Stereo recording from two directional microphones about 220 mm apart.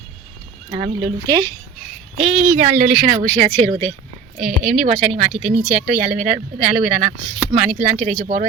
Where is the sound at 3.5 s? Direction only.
10° left (ahead or behind).